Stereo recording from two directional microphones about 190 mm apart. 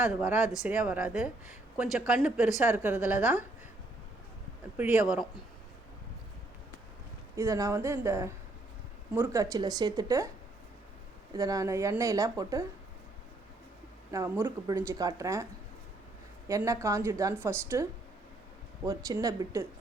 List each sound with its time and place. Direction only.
0.0 s a woman's voice: 5° right (ahead or behind)
4.8 s speech: 5° right (ahead or behind)
7.3 s a woman's voice: 15° right (ahead or behind)
11.3 s a woman's voice: 20° right (ahead or behind)
14.1 s a woman's voice: 15° right (ahead or behind)
16.5 s a woman's voice: 15° right (ahead or behind)
18.9 s a woman's voice: 20° right (ahead or behind)